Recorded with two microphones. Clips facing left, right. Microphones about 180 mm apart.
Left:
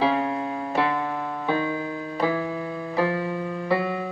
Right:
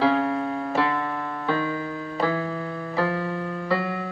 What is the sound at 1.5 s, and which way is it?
Music, 15° left (ahead or behind).